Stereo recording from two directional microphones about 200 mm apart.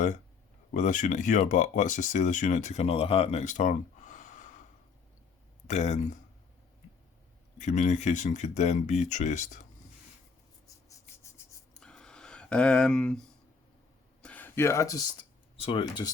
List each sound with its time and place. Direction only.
0.7 s speech: 40° left (ahead or behind)
5.6 s speech: 35° left (ahead or behind)
7.6 s speech: 35° left (ahead or behind)
10.8 s rub: 15° left (ahead or behind)
11.8 s a sound: 5° left (ahead or behind)
15.5 s speech: 25° left (ahead or behind)